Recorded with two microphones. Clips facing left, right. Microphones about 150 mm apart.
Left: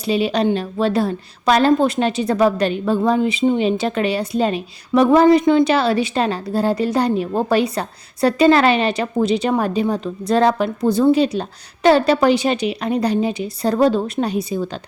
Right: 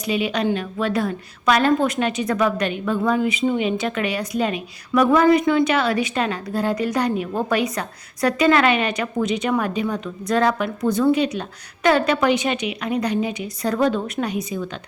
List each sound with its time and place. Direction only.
0.0 s a woman's voice: 30° left (ahead or behind)